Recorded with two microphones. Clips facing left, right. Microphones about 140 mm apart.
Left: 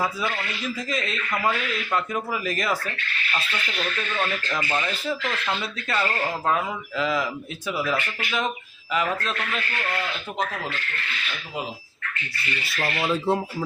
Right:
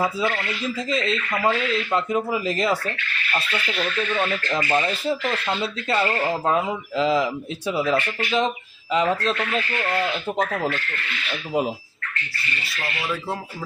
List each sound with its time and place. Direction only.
0.0 s speech: 20° right (ahead or behind)
4.1 s speech: 15° right (ahead or behind)
4.7 s speech: 35° right (ahead or behind)
12.8 s speech: 25° left (ahead or behind)